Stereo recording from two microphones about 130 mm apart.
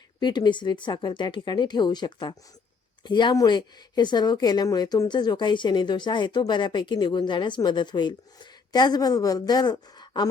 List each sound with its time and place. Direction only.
0.2 s a woman's voice: 35° left (ahead or behind)